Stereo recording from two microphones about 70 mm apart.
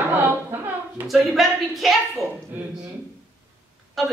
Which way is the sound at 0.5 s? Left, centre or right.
Right.